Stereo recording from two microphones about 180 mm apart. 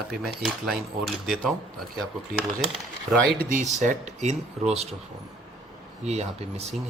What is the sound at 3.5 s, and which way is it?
Speech, 45° right (ahead or behind).